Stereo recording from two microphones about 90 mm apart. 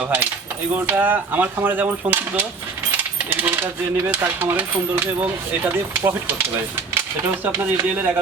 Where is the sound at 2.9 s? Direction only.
20° right (ahead or behind).